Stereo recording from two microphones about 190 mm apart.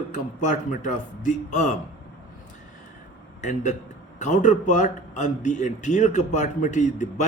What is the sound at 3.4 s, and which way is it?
A man's voice, 40° left (ahead or behind).